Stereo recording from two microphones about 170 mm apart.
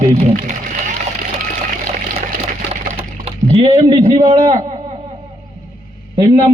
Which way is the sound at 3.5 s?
35° right (ahead or behind).